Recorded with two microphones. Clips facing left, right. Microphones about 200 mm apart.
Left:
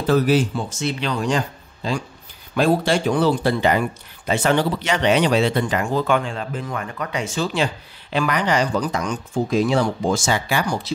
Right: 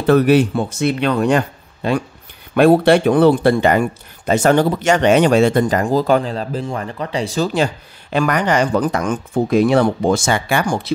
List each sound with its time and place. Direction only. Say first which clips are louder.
0.0 s speech: right 5 dB; 60° right (ahead or behind)